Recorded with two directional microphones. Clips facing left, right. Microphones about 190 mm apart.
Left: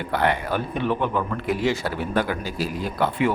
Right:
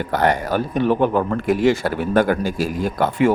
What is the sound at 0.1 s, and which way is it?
A man's voice, 40° right (ahead or behind).